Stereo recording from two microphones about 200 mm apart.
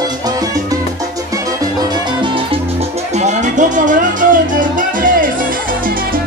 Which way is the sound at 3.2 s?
35° right (ahead or behind).